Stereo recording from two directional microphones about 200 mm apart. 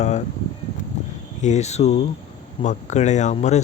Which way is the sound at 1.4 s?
35° left (ahead or behind).